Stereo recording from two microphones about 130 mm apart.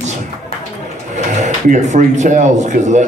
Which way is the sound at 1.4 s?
70° right (ahead or behind).